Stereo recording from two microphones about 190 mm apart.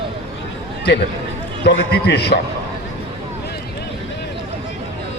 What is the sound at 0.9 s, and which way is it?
A man's voice, 60° left (ahead or behind).